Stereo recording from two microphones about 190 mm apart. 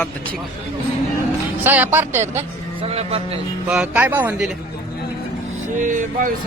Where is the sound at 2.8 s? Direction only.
30° right (ahead or behind).